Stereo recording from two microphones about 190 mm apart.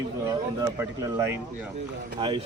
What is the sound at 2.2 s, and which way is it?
Speech, 25° right (ahead or behind).